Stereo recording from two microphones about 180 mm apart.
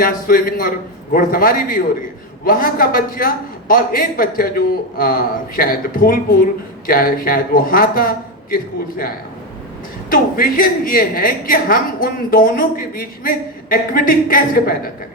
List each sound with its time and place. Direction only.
0.0 s a man's voice: 50° left (ahead or behind)